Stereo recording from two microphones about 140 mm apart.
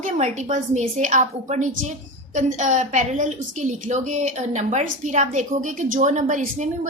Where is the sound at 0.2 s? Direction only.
60° right (ahead or behind).